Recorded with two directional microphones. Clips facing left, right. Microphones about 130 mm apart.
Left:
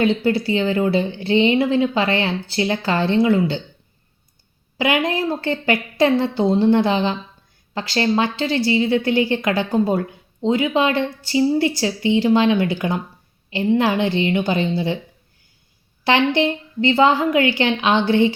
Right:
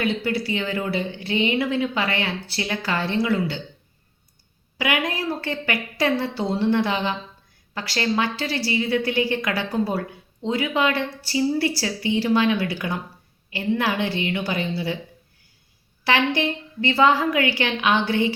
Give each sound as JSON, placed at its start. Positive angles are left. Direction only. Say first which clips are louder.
{"t": 0.0, "sound": "a woman's voice", "louder": "left 6 dB", "side_deg": 25}
{"t": 4.8, "sound": "a woman's voice", "louder": "left 5 dB", "side_deg": 25}
{"t": 16.0, "sound": "a woman's voice", "louder": "left 4 dB", "side_deg": 25}